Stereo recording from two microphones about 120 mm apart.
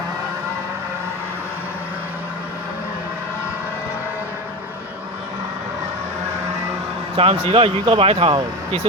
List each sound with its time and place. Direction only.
7.2 s speech: 50° right (ahead or behind)